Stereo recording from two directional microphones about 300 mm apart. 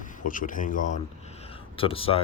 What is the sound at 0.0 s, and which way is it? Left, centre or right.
Speech, left.